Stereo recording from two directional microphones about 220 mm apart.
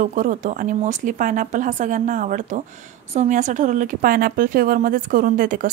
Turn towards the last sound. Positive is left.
turn(degrees=-40)  # may be behind; listen again after turning